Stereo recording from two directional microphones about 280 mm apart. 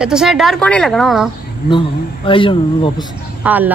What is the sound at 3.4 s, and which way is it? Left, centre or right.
Speech, centre.